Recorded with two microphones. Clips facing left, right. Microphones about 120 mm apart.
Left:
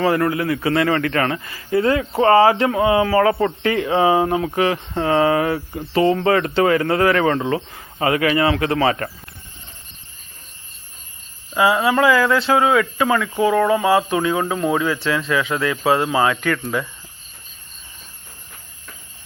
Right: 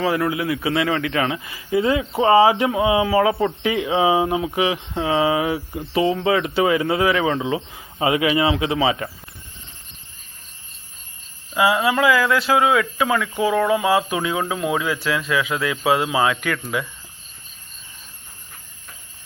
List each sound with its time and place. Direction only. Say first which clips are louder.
0.0 s speech: left 3 dB; 5° right (ahead or behind)
8.0 s speech: left 1 dB; 15° right (ahead or behind)
8.6 s speech: left 2 dB; 5° right (ahead or behind)
11.5 s speech: left 2 dB; centre (ahead or behind)